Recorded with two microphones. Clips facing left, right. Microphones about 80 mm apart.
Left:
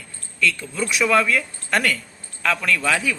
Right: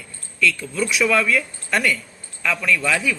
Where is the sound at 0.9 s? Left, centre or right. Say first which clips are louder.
Left 1 dB; left.